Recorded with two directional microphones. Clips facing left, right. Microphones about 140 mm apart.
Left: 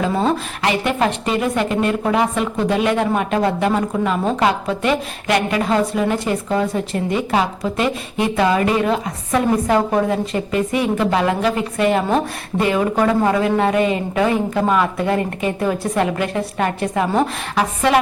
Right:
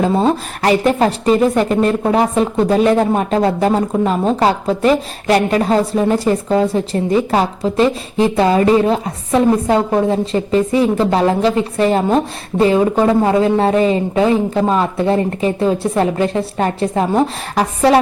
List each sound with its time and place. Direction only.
0.6 s a woman's voice: 35° right (ahead or behind)